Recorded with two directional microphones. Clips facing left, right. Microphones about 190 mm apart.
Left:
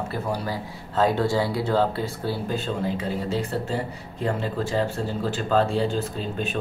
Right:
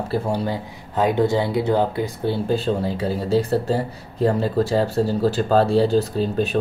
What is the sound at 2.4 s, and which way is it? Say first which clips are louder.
Speech: right 5 dB; 35° right (ahead or behind).